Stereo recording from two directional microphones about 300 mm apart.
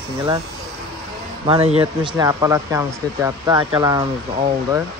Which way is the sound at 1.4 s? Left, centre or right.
Centre.